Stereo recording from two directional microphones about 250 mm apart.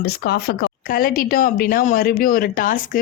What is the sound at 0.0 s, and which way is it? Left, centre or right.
Speech, left.